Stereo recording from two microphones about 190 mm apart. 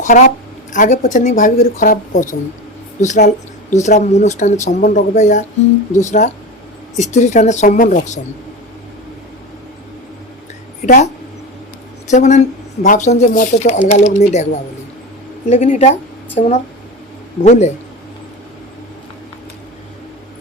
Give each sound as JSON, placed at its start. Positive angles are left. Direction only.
{"t": 0.0, "sound": "a woman's voice", "side_deg": 40}
{"t": 10.8, "sound": "speech", "side_deg": 40}
{"t": 12.1, "sound": "speech", "side_deg": 40}
{"t": 15.4, "sound": "speech", "side_deg": 35}